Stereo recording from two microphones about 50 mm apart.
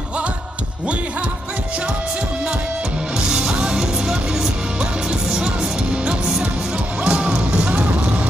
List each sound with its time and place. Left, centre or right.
3.3 s music: centre
6.0 s music: centre